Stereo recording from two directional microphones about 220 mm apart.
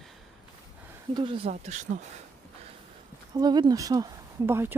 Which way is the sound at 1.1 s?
25° right (ahead or behind).